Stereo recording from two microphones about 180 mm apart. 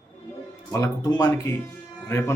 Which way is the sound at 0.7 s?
20° left (ahead or behind).